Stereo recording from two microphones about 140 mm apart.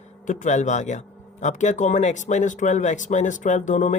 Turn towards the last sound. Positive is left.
turn(degrees=60)  # may be behind; listen again after turning